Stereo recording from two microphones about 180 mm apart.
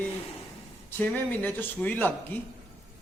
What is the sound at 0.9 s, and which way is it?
Speech, 10° left (ahead or behind).